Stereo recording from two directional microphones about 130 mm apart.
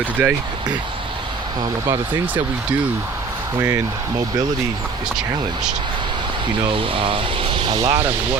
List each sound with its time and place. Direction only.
0.2 s speech: 10° right (ahead or behind)
6.7 s speech: 40° right (ahead or behind)